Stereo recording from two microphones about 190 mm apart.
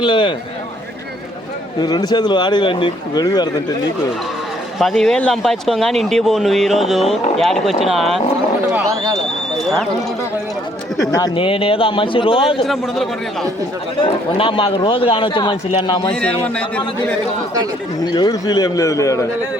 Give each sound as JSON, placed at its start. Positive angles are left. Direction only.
{"t": 0.0, "sound": "a man's voice", "side_deg": 25}
{"t": 1.8, "sound": "a man's voice", "side_deg": 20}
{"t": 4.8, "sound": "speech", "side_deg": 0}
{"t": 8.8, "sound": "speech", "side_deg": -15}
{"t": 9.1, "sound": "a sound", "side_deg": 0}
{"t": 11.0, "sound": "a man's voice", "side_deg": 20}
{"t": 12.6, "sound": "speech", "side_deg": 0}
{"t": 14.0, "sound": "a man's voice", "side_deg": 25}
{"t": 18.0, "sound": "a man's voice", "side_deg": 20}